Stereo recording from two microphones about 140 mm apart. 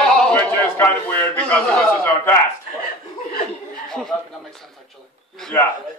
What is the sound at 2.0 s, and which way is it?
Speech, 15° left (ahead or behind).